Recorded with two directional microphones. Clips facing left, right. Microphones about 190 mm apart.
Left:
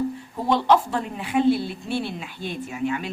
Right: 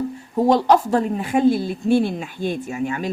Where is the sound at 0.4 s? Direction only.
40° right (ahead or behind).